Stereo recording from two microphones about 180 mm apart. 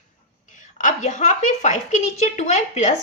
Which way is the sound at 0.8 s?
40° left (ahead or behind).